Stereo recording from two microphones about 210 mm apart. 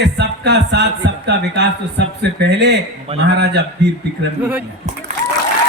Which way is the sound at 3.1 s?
30° right (ahead or behind).